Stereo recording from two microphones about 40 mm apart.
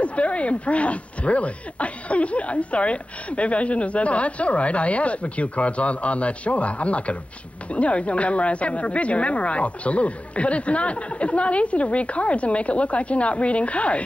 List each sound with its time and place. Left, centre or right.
0.0 s speech: left